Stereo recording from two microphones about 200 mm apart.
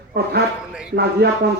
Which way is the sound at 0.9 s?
55° right (ahead or behind).